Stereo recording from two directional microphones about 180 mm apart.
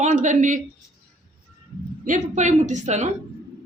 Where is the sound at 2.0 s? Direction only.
45° right (ahead or behind).